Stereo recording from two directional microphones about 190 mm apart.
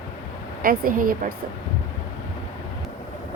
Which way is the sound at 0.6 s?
50° right (ahead or behind).